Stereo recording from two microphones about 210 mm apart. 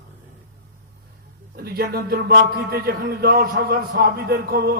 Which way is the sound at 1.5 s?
45° right (ahead or behind).